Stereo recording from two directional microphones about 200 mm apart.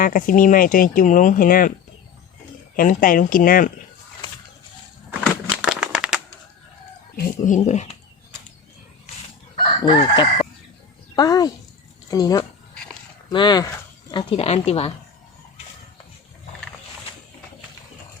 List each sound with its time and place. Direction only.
0.0 s speech: 45° left (ahead or behind)
2.7 s speech: 45° left (ahead or behind)
5.2 s a sound: 5° right (ahead or behind)
7.2 s speech: 40° left (ahead or behind)
9.8 s a woman's voice: 25° left (ahead or behind)
12.7 s dog: 5° left (ahead or behind)
13.3 s speech: 20° left (ahead or behind)